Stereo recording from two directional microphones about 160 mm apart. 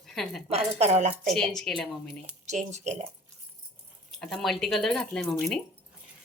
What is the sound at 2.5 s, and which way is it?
Speech, 45° right (ahead or behind).